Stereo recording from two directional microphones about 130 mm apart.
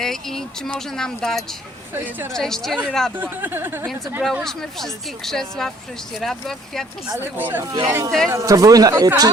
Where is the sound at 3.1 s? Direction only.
15° right (ahead or behind).